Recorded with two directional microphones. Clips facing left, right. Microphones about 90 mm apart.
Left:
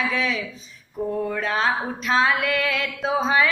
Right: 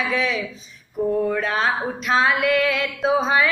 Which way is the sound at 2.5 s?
35° right (ahead or behind).